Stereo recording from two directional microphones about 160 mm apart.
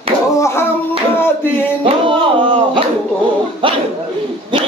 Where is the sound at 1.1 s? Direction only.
15° left (ahead or behind).